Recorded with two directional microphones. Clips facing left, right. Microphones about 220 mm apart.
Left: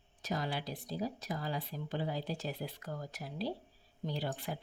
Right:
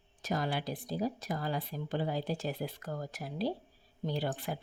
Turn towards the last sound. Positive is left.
turn(degrees=-55)  # may be behind; listen again after turning